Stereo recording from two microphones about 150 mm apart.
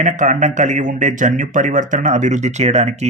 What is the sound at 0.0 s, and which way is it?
Speech, 55° right (ahead or behind).